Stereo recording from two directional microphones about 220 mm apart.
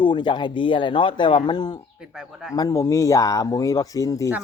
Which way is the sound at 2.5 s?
15° left (ahead or behind).